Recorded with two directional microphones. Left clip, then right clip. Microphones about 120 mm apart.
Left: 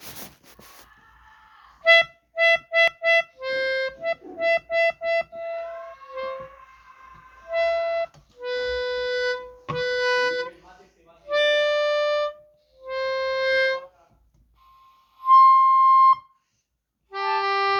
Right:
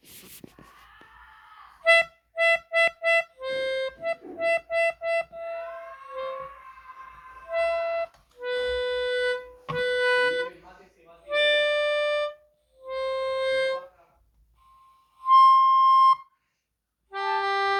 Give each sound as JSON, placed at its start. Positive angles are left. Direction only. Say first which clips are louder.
{"t": 1.8, "sound": "music", "louder": "left 3 dB", "side_deg": 55}
{"t": 7.5, "sound": "harmonica", "louder": "left 3 dB", "side_deg": 55}
{"t": 15.2, "sound": "harmonica", "louder": "left 2 dB", "side_deg": 70}
{"t": 17.1, "sound": "harmonica", "louder": "left 2 dB", "side_deg": 45}